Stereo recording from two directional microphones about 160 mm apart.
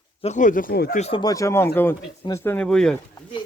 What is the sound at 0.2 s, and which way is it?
Speech, 50° left (ahead or behind).